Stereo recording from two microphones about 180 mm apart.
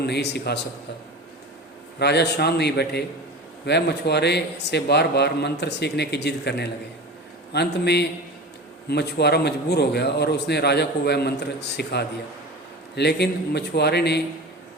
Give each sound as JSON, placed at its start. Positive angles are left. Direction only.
{"t": 0.0, "sound": "a man's voice", "side_deg": 65}
{"t": 2.0, "sound": "a man's voice", "side_deg": 65}